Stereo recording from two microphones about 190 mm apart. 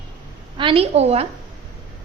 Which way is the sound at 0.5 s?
30° right (ahead or behind).